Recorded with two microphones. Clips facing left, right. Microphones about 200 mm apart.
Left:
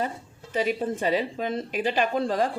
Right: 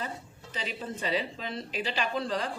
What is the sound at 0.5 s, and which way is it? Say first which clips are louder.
Speech: left 11 dB; 50° left (ahead or behind).